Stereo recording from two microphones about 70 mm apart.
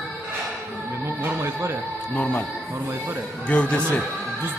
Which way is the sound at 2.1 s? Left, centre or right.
Left.